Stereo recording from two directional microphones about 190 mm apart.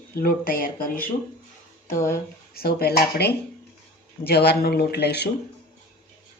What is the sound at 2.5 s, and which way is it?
Speech, 55° left (ahead or behind).